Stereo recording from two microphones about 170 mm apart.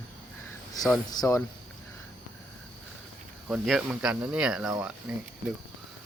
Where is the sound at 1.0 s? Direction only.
20° left (ahead or behind).